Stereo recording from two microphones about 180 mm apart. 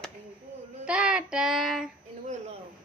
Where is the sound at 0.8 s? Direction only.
5° right (ahead or behind).